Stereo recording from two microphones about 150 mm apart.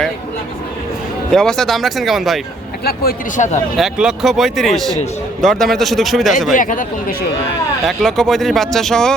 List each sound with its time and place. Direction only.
1.3 s speech: 5° left (ahead or behind)
2.8 s speech: 85° left
3.8 s speech: 5° right (ahead or behind)
6.5 s speech: 60° left (ahead or behind)
7.9 s speech: centre (ahead or behind)